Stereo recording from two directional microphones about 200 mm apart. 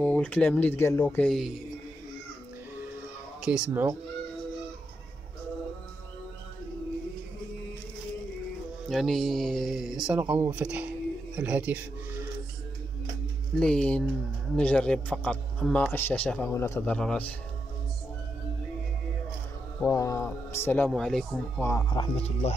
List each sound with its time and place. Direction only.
0.0 s a man's voice: 5° left (ahead or behind)
3.3 s speech: 5° right (ahead or behind)
8.8 s speech: centre (ahead or behind)
13.6 s a man's voice: 5° left (ahead or behind)
19.8 s a man's voice: 15° left (ahead or behind)
21.8 s speech: 25° left (ahead or behind)